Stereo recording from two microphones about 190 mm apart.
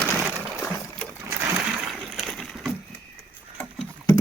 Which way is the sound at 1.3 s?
10° right (ahead or behind).